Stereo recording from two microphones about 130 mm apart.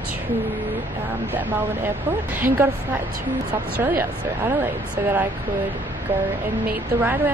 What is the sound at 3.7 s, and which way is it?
Speech, 15° right (ahead or behind).